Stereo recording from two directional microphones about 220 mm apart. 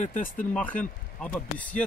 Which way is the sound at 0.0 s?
35° left (ahead or behind).